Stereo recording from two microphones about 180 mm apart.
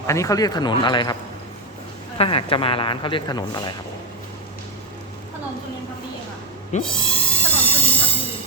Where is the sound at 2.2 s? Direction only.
30° left (ahead or behind).